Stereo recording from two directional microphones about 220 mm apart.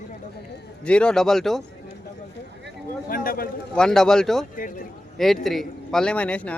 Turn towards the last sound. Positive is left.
turn(degrees=5)  # may be behind; listen again after turning